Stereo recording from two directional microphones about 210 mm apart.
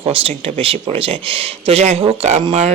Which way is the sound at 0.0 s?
25° right (ahead or behind).